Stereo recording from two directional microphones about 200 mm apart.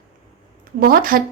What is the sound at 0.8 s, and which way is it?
Speech, 45° right (ahead or behind).